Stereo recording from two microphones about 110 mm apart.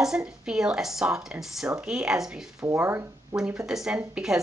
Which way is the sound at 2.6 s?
25° right (ahead or behind).